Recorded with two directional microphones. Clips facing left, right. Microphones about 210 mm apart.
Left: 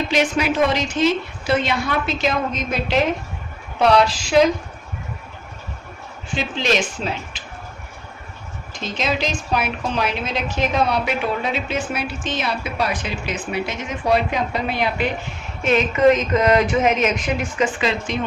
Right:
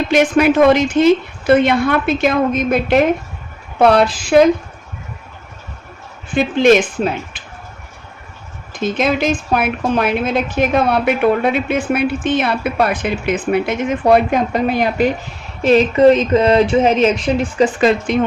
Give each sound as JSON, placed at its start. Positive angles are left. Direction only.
{"t": 0.1, "sound": "a woman's voice", "side_deg": -55}
{"t": 6.3, "sound": "a woman's voice", "side_deg": -55}
{"t": 8.7, "sound": "a woman's voice", "side_deg": -55}
{"t": 17.7, "sound": "a woman's voice", "side_deg": -50}